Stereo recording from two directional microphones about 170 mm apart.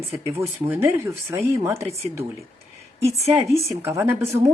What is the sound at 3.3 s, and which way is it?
Speech, 15° right (ahead or behind).